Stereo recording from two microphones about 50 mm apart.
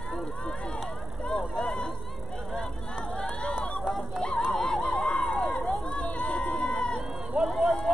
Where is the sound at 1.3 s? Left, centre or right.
Centre.